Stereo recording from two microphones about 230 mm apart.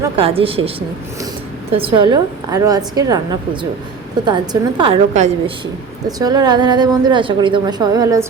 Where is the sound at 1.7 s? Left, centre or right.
Right.